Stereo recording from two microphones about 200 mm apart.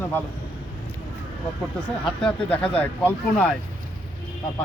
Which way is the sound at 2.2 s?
5° left (ahead or behind).